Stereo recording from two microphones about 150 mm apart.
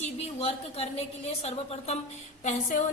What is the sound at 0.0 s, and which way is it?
Speech, 45° left (ahead or behind).